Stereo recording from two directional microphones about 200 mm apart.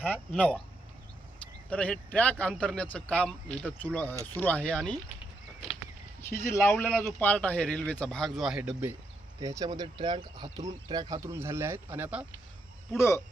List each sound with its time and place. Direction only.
0.0 s speech: 5° left (ahead or behind)
1.7 s speech: 5° left (ahead or behind)
6.2 s speech: 15° left (ahead or behind); by 8.9 s 5° right (ahead or behind)
9.4 s speech: 15° right (ahead or behind)
13.0 s speech: 15° left (ahead or behind)